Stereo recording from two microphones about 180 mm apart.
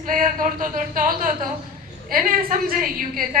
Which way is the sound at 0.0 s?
45° right (ahead or behind).